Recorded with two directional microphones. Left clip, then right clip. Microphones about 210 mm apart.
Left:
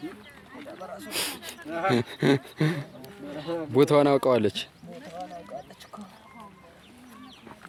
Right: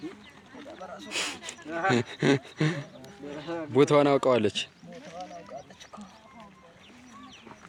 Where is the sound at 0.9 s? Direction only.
5° left (ahead or behind).